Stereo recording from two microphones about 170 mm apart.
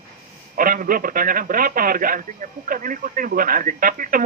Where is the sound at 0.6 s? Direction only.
55° right (ahead or behind).